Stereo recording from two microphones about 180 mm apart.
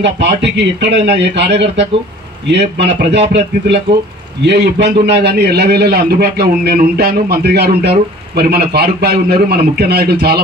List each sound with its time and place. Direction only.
0.0 s a man's voice: 70° right (ahead or behind)